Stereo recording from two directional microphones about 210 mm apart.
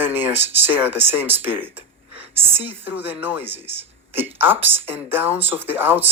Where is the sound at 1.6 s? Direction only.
10° right (ahead or behind).